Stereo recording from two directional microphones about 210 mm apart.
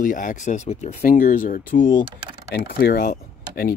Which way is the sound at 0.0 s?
40° left (ahead or behind).